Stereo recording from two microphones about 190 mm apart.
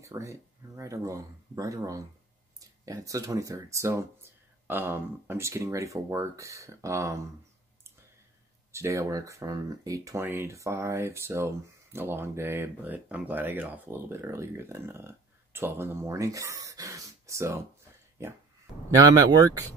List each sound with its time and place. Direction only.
0.0 s speech: 15° right (ahead or behind)
8.7 s speech: 15° right (ahead or behind)